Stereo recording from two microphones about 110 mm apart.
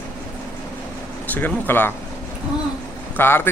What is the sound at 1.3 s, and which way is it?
Speech, 15° left (ahead or behind).